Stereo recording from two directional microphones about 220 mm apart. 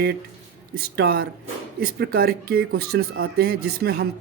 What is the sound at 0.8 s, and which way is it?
Speech, 45° right (ahead or behind).